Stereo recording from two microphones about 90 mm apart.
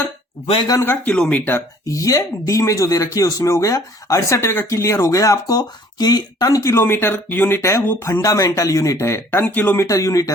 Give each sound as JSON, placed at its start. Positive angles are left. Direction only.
{"t": 0.8, "sound": "speech", "side_deg": 25}
{"t": 1.1, "sound": "speech", "side_deg": 5}
{"t": 1.9, "sound": "speech", "side_deg": 40}
{"t": 9.8, "sound": "speech", "side_deg": 35}